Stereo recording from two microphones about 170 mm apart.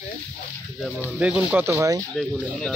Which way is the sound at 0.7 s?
Centre (ahead or behind).